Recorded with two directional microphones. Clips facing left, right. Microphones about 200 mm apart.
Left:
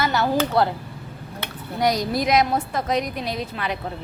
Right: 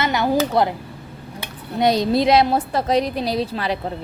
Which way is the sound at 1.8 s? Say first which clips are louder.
Right 5 dB; 25° right (ahead or behind).